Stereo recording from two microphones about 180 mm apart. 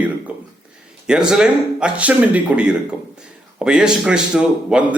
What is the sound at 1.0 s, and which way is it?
A man's voice, 5° right (ahead or behind).